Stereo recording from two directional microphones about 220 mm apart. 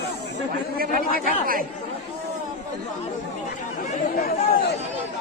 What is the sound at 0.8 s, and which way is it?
Speech, 40° right (ahead or behind).